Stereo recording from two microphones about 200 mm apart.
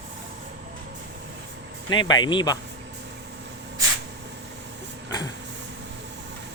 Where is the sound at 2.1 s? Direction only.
20° left (ahead or behind).